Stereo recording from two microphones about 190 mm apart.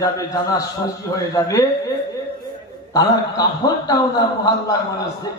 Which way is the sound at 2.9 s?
20° left (ahead or behind).